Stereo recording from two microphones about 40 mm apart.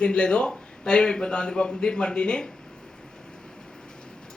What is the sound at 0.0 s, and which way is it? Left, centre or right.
A man's voice, left.